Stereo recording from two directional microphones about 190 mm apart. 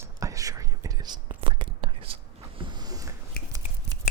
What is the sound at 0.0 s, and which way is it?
Whispering, 15° right (ahead or behind).